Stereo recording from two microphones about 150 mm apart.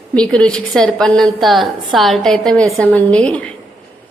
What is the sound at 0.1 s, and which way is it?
A woman's voice, 5° left (ahead or behind).